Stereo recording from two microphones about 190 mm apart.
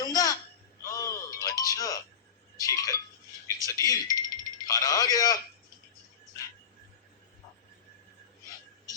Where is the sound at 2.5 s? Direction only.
20° left (ahead or behind).